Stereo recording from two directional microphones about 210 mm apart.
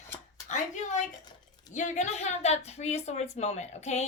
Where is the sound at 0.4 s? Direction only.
35° left (ahead or behind).